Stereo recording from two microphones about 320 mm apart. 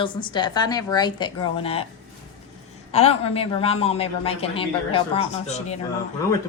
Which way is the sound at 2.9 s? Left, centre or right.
Centre.